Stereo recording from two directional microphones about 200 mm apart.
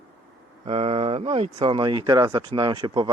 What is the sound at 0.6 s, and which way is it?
Speech, 30° right (ahead or behind).